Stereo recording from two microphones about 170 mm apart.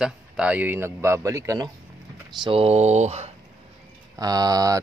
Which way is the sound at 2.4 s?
35° right (ahead or behind).